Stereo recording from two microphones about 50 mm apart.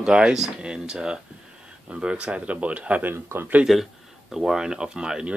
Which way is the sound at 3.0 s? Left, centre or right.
Right.